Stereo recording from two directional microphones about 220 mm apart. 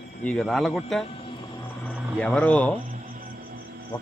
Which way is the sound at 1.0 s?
25° left (ahead or behind).